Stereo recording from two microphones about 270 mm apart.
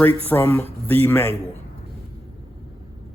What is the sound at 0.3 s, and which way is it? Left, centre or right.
Speech, centre.